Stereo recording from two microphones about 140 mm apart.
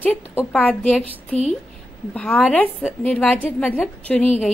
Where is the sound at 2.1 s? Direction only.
5° left (ahead or behind).